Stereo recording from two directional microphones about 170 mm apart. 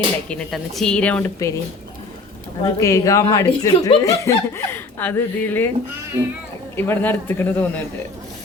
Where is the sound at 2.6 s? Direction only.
20° left (ahead or behind).